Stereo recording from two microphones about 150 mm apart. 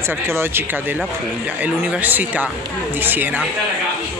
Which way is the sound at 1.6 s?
10° right (ahead or behind).